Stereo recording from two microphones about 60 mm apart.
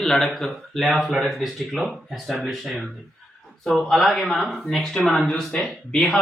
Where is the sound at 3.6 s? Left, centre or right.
Centre.